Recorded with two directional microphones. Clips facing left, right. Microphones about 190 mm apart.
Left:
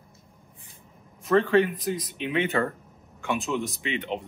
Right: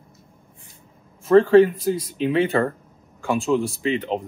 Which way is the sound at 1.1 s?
30° right (ahead or behind).